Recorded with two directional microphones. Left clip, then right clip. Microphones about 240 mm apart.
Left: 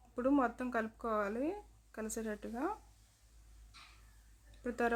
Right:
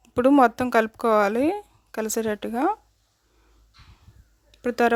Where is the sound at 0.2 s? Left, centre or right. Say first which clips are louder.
Right 16 dB; right.